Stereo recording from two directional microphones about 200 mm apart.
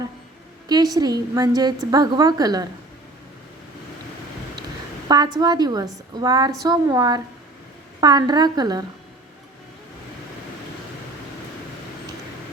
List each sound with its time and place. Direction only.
0.7 s a woman's voice: 20° right (ahead or behind)
5.0 s a woman's voice: 20° right (ahead or behind)